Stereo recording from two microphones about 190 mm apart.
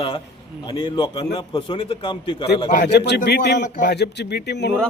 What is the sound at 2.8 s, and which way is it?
Speech, 60° left (ahead or behind).